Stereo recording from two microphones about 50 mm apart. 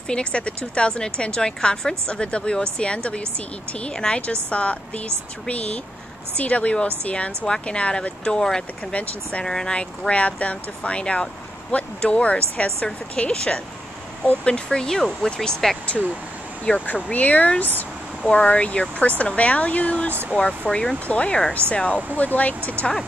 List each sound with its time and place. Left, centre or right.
0.1 s a woman's voice: left
16.7 s a woman's voice: left